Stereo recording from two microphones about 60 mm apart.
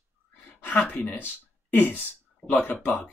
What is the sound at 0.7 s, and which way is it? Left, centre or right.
Speech, left.